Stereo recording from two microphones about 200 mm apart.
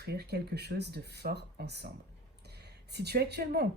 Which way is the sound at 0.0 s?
55° right (ahead or behind).